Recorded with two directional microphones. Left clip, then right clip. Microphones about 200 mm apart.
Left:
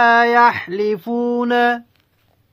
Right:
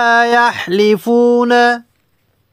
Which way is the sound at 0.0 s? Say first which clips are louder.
Right 1 dB; 55° right (ahead or behind).